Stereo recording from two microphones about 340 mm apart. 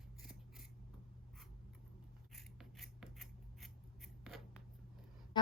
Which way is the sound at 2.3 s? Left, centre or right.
Centre.